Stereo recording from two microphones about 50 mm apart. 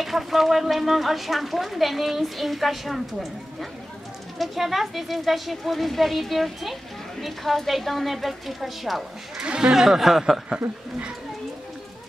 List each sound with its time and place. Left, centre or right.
0.0 s speech: centre
4.4 s speech: centre
9.4 s speech: centre
9.8 s speech: centre